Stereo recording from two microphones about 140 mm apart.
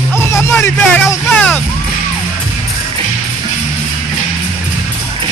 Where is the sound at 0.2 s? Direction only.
20° left (ahead or behind).